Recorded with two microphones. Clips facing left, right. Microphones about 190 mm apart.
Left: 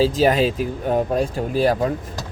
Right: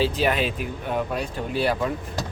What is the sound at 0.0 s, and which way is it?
Speech, 40° left (ahead or behind).